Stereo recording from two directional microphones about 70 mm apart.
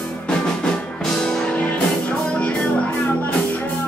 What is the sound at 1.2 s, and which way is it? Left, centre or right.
Music, centre.